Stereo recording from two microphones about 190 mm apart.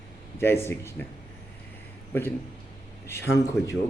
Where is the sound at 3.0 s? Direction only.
15° left (ahead or behind).